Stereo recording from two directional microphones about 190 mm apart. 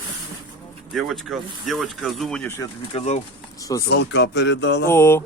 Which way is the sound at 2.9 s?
35° left (ahead or behind).